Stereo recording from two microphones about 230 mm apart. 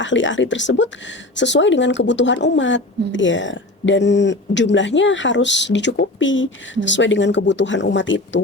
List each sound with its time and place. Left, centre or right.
0.0 s speech: left